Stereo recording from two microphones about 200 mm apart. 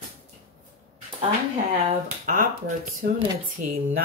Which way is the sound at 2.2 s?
40° right (ahead or behind).